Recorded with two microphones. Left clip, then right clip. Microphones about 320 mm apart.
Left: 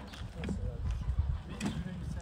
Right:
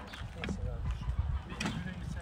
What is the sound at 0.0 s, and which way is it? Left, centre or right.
Vehicle, centre.